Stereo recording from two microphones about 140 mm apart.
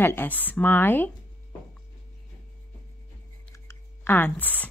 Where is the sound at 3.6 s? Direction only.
15° left (ahead or behind).